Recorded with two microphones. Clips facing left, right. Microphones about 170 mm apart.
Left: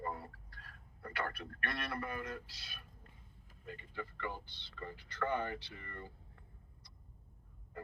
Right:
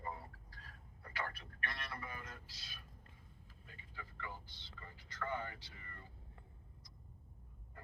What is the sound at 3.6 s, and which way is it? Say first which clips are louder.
Speech: left 11 dB; 65° left (ahead or behind).